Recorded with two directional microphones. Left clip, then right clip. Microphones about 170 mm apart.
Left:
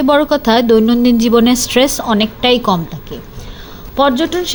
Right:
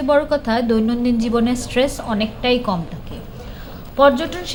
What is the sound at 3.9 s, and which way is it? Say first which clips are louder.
Speech: left 2 dB; 40° left (ahead or behind).